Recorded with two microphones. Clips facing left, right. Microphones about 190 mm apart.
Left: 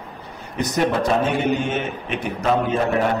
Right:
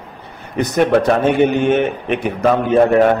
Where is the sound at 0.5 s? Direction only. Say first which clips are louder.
Right 7 dB; 60° right (ahead or behind).